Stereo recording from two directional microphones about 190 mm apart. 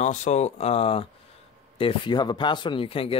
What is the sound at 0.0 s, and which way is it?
Speech, 40° left (ahead or behind).